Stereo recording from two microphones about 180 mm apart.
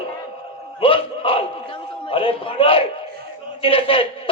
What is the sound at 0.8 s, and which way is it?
Speech, 30° left (ahead or behind).